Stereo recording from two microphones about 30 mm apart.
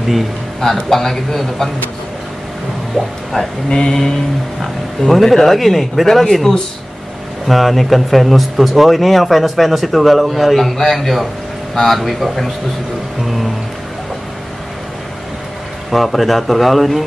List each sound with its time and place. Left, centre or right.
0.8 s a man's voice: centre
3.3 s a sound: left
4.6 s speech: centre
7.4 s speech: centre
15.9 s speech: centre